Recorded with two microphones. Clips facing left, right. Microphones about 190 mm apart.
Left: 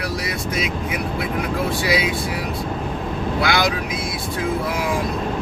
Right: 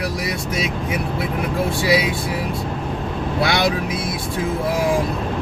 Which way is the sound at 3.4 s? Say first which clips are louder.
Right 2 dB; 30° right (ahead or behind).